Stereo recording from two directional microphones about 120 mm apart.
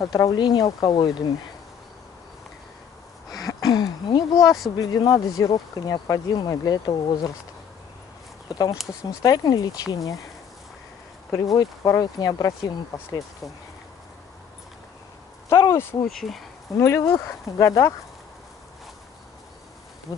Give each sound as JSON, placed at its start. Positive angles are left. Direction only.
{"t": 0.0, "sound": "speech", "side_deg": 30}
{"t": 3.3, "sound": "a sound", "side_deg": 30}
{"t": 4.7, "sound": "speech", "side_deg": 30}
{"t": 8.5, "sound": "speech", "side_deg": 35}
{"t": 11.5, "sound": "speech", "side_deg": 30}
{"t": 15.5, "sound": "a sound", "side_deg": 25}
{"t": 16.1, "sound": "speech", "side_deg": 0}
{"t": 16.7, "sound": "speech", "side_deg": 20}
{"t": 20.1, "sound": "speech", "side_deg": 30}